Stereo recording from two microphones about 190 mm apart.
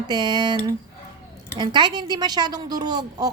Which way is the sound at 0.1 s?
20° right (ahead or behind).